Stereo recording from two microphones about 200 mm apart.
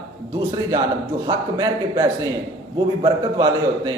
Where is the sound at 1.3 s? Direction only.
20° right (ahead or behind).